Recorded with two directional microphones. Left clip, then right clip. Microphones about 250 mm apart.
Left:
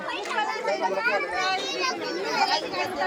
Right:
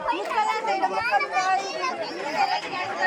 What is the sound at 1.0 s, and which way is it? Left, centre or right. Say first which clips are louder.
Speech: right 2 dB; right.